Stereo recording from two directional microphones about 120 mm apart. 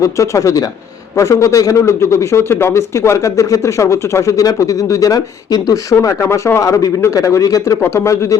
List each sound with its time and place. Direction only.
0.0 s a man's voice: 25° left (ahead or behind)